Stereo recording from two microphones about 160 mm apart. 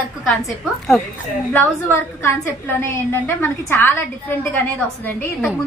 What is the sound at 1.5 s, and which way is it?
A woman's voice, 10° left (ahead or behind).